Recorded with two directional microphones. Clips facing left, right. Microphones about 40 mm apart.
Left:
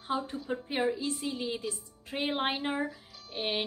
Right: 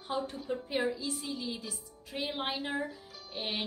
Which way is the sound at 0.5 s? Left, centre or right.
Left.